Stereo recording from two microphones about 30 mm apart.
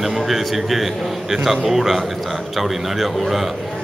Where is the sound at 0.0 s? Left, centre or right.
Centre.